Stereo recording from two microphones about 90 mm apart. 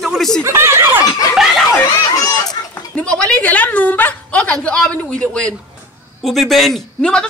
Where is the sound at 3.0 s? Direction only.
10° left (ahead or behind).